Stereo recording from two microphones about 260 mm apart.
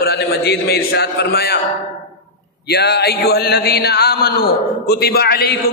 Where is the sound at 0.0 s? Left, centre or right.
Left.